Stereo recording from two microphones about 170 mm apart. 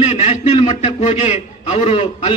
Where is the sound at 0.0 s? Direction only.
35° left (ahead or behind).